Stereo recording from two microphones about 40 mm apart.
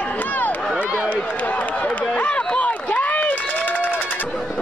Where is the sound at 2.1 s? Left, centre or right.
Left.